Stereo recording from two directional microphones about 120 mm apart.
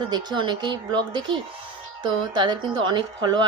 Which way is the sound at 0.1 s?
35° right (ahead or behind).